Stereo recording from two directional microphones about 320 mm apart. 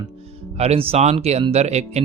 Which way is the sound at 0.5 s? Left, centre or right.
Centre.